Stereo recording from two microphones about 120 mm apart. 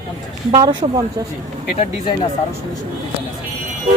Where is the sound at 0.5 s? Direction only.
35° right (ahead or behind).